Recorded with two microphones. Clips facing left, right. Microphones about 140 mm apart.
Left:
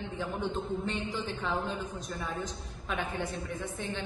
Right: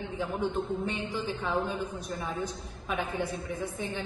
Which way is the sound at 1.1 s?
10° right (ahead or behind).